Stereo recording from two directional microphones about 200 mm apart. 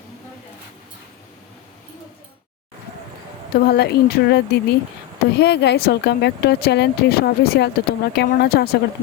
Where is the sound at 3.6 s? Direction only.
55° left (ahead or behind).